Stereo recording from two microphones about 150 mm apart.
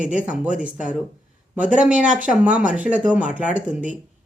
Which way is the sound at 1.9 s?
55° right (ahead or behind).